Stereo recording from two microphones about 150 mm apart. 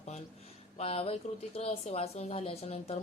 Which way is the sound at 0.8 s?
40° left (ahead or behind).